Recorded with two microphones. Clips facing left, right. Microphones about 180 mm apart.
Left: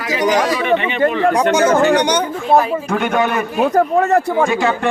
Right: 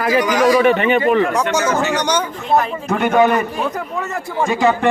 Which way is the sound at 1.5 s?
55° left (ahead or behind).